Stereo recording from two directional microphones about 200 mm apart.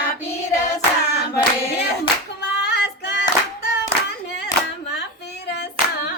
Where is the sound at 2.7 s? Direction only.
60° left (ahead or behind).